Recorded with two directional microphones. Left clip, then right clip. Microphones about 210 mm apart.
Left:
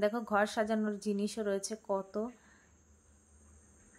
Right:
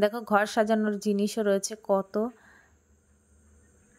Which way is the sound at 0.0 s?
35° right (ahead or behind).